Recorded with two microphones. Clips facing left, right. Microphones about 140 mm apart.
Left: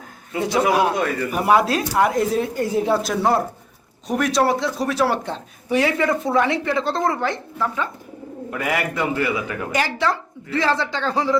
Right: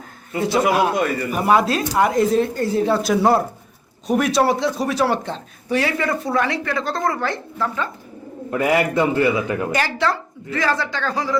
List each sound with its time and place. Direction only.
0.8 s a man's voice: 10° right (ahead or behind)
1.4 s speech: 10° left (ahead or behind)
3.0 s speech: 5° right (ahead or behind); by 7.9 s 15° left (ahead or behind)
8.4 s a man's voice: 25° right (ahead or behind)
9.7 s speech: 15° left (ahead or behind)
10.5 s speech: 25° left (ahead or behind)